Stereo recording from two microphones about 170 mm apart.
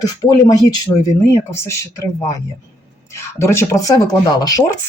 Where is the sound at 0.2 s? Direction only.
25° left (ahead or behind).